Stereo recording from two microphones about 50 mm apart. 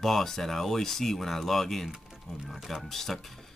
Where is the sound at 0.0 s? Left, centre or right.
Centre.